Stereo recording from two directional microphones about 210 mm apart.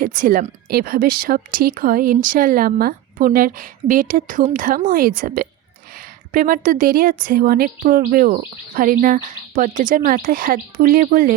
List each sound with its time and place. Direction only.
0.0 s speech: 40° right (ahead or behind)